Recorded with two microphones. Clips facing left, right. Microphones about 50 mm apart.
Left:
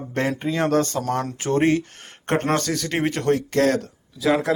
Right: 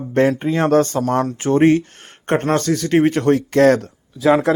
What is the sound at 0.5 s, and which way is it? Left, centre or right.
Speech, right.